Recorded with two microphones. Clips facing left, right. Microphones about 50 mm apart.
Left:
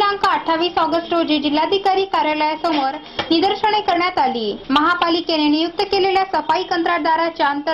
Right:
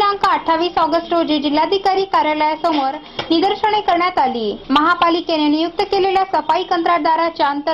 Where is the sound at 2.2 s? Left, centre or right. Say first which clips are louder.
Right 2 dB; centre.